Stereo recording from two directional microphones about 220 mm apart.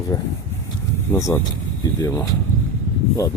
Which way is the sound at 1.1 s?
15° left (ahead or behind).